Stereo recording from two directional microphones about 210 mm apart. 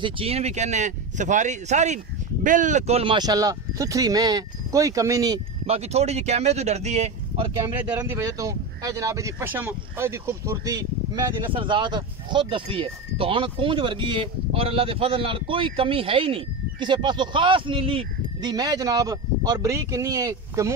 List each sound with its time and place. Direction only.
0.0 s speech: 25° right (ahead or behind)
5.7 s speech: 30° right (ahead or behind)
7.8 s speech: 10° right (ahead or behind)